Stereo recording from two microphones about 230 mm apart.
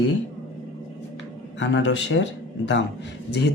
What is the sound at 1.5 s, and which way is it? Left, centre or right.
Speech, left.